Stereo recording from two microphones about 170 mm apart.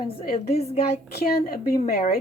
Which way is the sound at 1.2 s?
65° left (ahead or behind).